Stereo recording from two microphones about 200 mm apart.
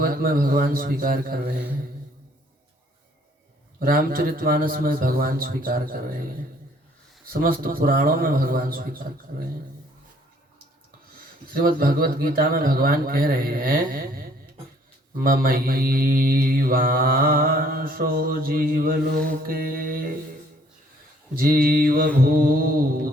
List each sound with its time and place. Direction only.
0.0 s mantra: 45° right (ahead or behind)
3.8 s mantra: 45° right (ahead or behind)
7.3 s mantra: 45° right (ahead or behind)
11.5 s mantra: 45° right (ahead or behind)
21.3 s mantra: 45° right (ahead or behind)